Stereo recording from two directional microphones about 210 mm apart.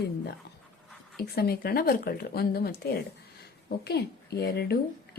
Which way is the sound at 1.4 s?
45° left (ahead or behind).